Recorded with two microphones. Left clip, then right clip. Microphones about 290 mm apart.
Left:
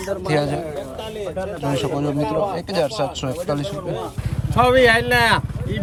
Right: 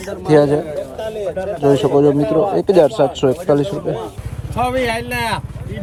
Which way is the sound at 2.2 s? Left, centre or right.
Left.